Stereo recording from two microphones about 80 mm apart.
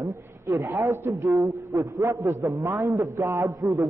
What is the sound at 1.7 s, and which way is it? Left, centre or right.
A man's voice, right.